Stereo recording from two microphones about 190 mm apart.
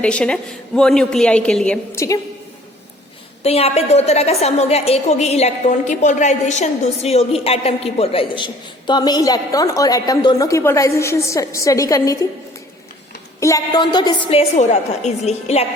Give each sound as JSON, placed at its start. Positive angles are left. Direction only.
{"t": 0.0, "sound": "a woman's voice", "side_deg": 5}
{"t": 3.4, "sound": "a woman's voice", "side_deg": 35}
{"t": 13.4, "sound": "a woman's voice", "side_deg": 20}